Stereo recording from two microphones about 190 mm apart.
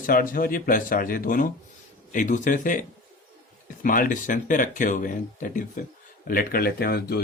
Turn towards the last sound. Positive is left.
turn(degrees=55)  # may be behind; listen again after turning